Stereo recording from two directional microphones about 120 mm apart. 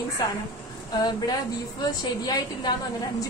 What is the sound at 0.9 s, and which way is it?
A woman's voice, 35° left (ahead or behind).